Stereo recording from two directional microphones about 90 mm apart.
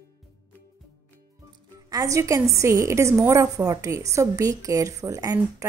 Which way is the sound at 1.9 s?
40° right (ahead or behind).